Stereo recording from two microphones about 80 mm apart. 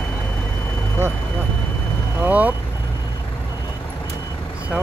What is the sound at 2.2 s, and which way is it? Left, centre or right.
Vehicle, centre.